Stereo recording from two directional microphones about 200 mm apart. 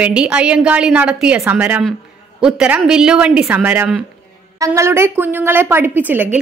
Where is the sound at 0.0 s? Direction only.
5° right (ahead or behind).